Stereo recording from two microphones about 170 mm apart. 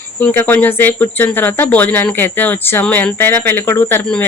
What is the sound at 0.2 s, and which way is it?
Speech, 10° left (ahead or behind).